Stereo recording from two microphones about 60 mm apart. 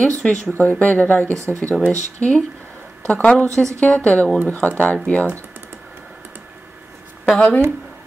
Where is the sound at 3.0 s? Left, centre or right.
Centre.